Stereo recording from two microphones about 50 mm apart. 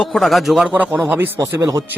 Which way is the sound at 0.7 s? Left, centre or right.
Right.